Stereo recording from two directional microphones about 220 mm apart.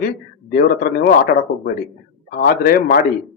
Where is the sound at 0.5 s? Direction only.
45° left (ahead or behind).